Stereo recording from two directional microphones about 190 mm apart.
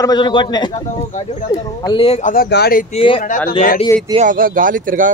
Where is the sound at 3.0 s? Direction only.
30° left (ahead or behind).